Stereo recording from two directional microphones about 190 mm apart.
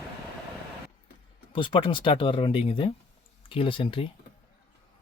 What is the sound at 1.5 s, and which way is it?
Speech, 25° left (ahead or behind).